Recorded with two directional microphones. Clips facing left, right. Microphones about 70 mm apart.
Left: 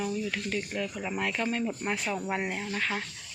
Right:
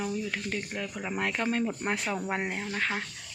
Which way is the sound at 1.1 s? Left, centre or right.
Right.